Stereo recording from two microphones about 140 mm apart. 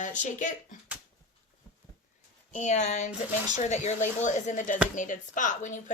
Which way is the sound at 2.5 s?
55° left (ahead or behind).